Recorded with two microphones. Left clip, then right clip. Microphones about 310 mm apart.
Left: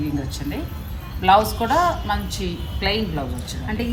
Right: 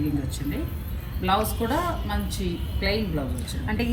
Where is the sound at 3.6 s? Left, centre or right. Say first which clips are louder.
Left 1 dB; centre.